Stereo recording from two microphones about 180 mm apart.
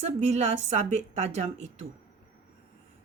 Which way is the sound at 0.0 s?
40° right (ahead or behind).